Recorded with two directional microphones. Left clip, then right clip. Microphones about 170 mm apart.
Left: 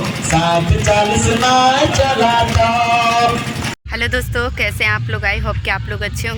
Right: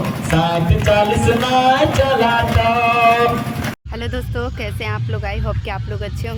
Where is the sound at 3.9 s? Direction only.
Centre (ahead or behind).